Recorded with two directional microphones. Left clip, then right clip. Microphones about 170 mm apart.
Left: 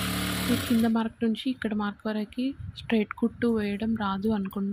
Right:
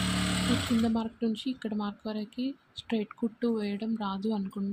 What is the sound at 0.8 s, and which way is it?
Speech, 45° left (ahead or behind).